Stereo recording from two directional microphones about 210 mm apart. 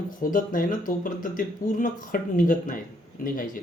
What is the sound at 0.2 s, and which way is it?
Speech, 40° left (ahead or behind).